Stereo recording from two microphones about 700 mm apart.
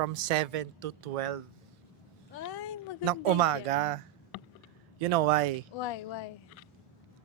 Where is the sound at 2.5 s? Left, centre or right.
Left.